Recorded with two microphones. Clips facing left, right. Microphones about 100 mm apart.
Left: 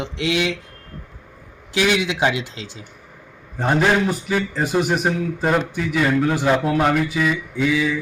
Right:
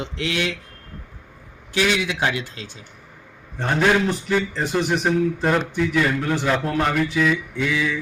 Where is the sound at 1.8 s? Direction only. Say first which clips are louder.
Left 2 dB; 20° left (ahead or behind).